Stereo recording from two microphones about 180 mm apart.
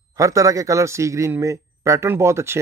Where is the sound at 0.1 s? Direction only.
20° right (ahead or behind).